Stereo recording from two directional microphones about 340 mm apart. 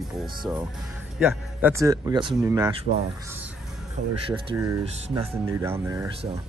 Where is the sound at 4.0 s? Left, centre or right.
Right.